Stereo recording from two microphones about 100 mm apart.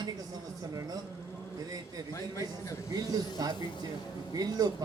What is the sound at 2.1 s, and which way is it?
Speech, 30° left (ahead or behind).